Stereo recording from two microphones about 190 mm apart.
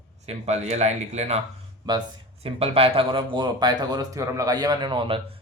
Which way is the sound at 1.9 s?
20° right (ahead or behind).